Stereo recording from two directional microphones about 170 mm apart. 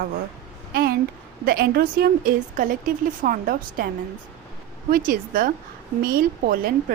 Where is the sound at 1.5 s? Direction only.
60° right (ahead or behind).